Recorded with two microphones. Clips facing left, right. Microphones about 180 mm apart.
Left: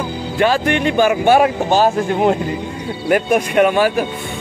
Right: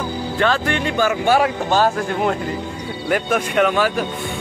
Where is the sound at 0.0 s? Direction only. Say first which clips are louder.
Left 3 dB; 15° left (ahead or behind).